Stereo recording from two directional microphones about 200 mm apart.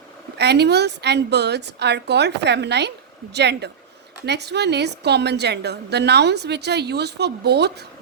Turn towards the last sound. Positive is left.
turn(degrees=-55)  # may be behind; listen again after turning